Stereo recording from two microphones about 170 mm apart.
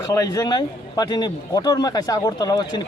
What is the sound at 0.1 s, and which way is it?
A man's voice, 20° left (ahead or behind).